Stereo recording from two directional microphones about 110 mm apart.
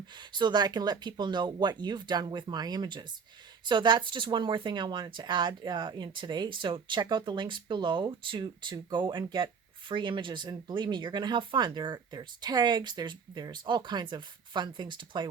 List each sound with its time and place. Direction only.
0.3 s speech: 40° right (ahead or behind)